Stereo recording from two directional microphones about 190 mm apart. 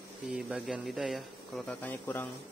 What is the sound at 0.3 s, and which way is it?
Speech, centre (ahead or behind).